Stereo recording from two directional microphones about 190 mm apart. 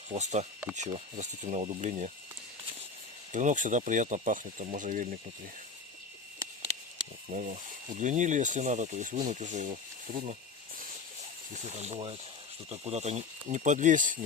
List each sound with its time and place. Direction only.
0.1 s speech: 35° right (ahead or behind)
3.3 s speech: 40° right (ahead or behind)
7.3 s speech: 45° right (ahead or behind)
11.5 s speech: 35° right (ahead or behind)